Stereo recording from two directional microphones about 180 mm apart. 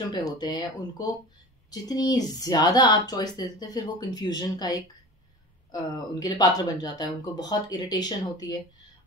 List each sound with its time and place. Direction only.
0.4 s speech: 25° left (ahead or behind)